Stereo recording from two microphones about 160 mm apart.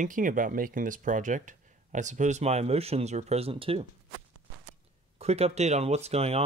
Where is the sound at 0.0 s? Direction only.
55° right (ahead or behind); by 3.8 s 35° right (ahead or behind).